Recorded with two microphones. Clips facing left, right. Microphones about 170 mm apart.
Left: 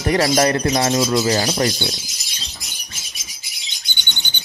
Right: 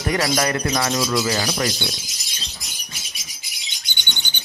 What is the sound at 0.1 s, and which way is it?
Speech, 35° left (ahead or behind).